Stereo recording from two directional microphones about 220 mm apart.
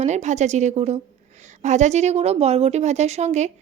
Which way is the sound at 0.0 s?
30° right (ahead or behind).